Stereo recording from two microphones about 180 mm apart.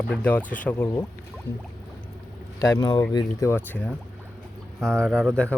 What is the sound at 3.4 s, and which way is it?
Speech, 10° left (ahead or behind).